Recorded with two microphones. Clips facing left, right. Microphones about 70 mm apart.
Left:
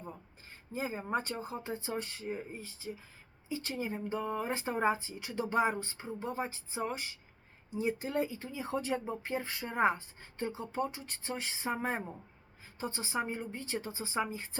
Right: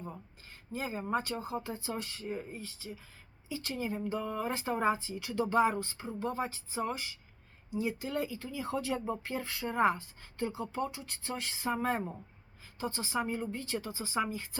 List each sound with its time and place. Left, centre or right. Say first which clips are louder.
0.7 s speech: right 1 dB; left
2.2 s speech: right 1 dB; centre